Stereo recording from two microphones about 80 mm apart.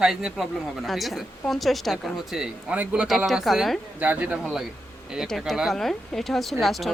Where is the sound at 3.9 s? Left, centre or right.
Centre.